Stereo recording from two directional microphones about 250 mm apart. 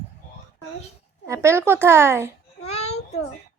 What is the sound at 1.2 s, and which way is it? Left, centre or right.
A woman's voice, centre.